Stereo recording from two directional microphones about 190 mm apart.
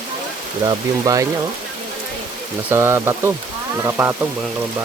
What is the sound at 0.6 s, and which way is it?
Speech, 20° right (ahead or behind).